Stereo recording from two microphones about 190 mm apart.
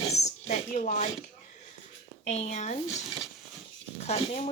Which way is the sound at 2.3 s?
35° left (ahead or behind).